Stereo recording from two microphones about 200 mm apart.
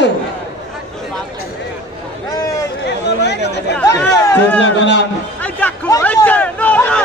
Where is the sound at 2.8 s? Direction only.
55° left (ahead or behind).